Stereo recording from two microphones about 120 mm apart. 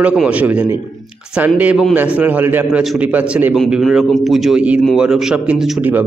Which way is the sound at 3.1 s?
15° right (ahead or behind).